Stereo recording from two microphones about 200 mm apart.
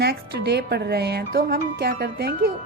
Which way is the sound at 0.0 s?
50° right (ahead or behind).